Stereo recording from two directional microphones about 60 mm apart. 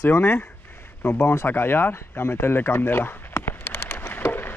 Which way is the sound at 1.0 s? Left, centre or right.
Left.